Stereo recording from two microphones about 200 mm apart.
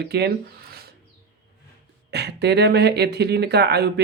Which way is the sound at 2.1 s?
55° right (ahead or behind).